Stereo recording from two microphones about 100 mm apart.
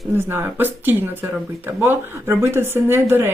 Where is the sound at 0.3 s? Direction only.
20° right (ahead or behind).